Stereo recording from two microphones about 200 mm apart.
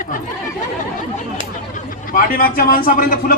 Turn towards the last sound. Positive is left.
turn(degrees=45)  # may be behind; listen again after turning